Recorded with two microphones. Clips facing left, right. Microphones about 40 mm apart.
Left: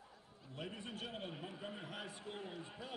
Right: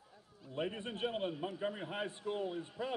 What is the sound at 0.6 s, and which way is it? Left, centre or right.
A man's voice, right.